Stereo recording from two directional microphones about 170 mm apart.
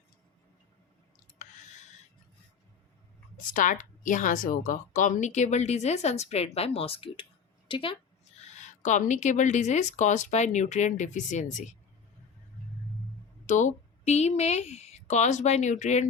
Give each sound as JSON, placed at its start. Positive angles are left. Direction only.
{"t": 3.5, "sound": "speech", "side_deg": 50}
{"t": 7.7, "sound": "a sound", "side_deg": 30}
{"t": 8.5, "sound": "speech", "side_deg": 45}
{"t": 13.5, "sound": "speech", "side_deg": 45}